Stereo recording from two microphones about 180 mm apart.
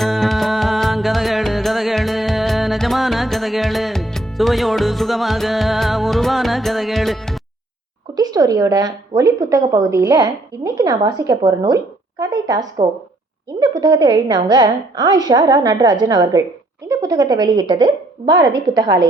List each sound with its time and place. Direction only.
0.0 s music: centre (ahead or behind)
8.1 s a woman's voice: 20° right (ahead or behind)